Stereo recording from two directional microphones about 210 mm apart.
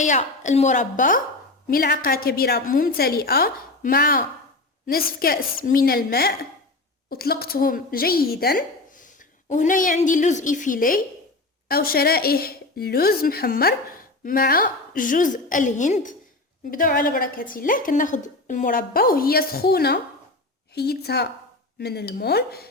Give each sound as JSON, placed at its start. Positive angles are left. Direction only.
{"t": 0.0, "sound": "a woman's voice", "side_deg": 35}